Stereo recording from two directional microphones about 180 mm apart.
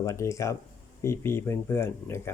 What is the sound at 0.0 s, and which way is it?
Speech, 15° left (ahead or behind).